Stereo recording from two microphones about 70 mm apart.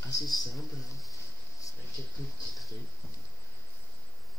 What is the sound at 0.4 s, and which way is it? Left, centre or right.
Speech, left.